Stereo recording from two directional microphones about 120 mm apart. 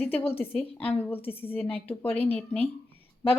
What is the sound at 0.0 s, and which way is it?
A woman's voice, 15° left (ahead or behind).